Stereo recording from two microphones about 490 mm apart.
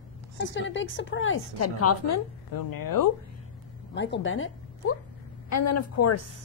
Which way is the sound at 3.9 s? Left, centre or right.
Left.